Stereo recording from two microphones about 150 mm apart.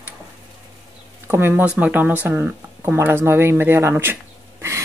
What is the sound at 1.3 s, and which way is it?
Speech, 15° right (ahead or behind).